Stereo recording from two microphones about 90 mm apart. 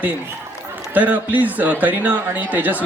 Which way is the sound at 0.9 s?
20° right (ahead or behind).